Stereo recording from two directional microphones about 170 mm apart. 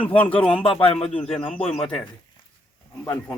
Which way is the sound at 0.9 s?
35° left (ahead or behind).